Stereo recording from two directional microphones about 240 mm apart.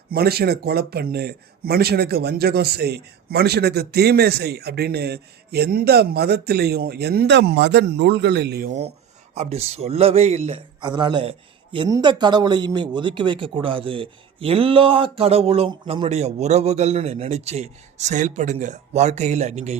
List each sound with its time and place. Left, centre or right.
0.1 s speech: right
9.3 s a man's voice: right